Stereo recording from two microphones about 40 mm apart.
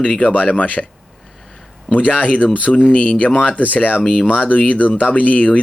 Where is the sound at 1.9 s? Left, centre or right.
Left.